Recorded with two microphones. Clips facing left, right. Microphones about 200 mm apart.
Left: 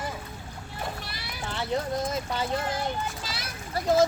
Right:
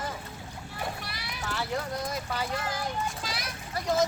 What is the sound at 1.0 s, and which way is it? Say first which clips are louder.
Speech: even; 25° left (ahead or behind).